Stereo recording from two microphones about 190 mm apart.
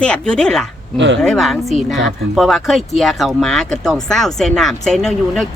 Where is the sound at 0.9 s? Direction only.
70° right (ahead or behind).